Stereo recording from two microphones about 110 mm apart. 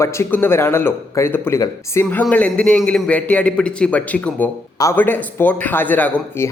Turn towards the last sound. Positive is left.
turn(degrees=20)  # may be behind; listen again after turning